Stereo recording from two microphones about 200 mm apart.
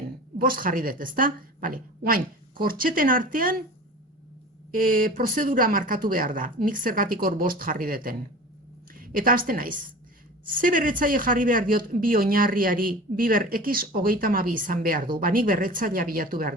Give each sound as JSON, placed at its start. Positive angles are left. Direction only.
{"t": 0.3, "sound": "speech", "side_deg": -45}
{"t": 4.7, "sound": "a woman's voice", "side_deg": -45}